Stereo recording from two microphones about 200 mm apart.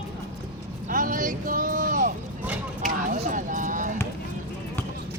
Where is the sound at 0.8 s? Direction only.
40° right (ahead or behind).